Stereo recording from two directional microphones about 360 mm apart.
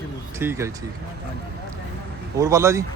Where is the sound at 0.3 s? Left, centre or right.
Centre.